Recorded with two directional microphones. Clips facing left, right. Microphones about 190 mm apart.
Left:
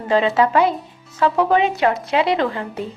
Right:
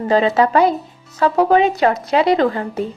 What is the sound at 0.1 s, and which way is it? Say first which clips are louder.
A woman's voice: right 2 dB; 40° right (ahead or behind).